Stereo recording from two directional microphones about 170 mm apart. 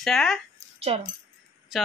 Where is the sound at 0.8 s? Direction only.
35° right (ahead or behind).